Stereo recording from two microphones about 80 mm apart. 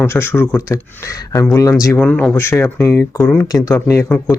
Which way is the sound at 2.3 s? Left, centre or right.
Left.